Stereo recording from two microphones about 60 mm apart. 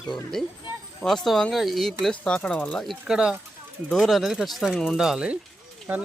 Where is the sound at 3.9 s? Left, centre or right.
Centre.